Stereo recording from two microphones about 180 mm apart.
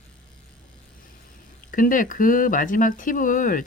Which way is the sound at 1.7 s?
50° left (ahead or behind).